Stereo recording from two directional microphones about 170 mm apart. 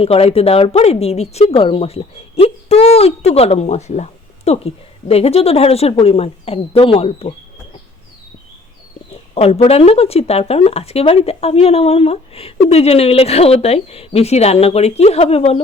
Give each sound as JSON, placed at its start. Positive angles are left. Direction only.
{"t": 0.0, "sound": "speech", "side_deg": 35}
{"t": 9.3, "sound": "speech", "side_deg": 35}